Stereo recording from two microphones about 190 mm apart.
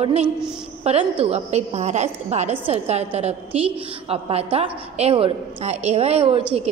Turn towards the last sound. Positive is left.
turn(degrees=-30)  # may be behind; listen again after turning